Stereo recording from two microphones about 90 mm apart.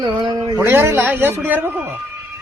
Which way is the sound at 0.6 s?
25° right (ahead or behind).